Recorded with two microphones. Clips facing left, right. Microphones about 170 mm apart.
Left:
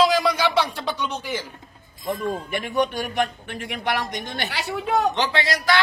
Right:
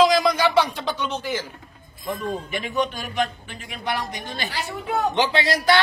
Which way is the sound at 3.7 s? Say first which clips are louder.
Left 2 dB; 75° left (ahead or behind).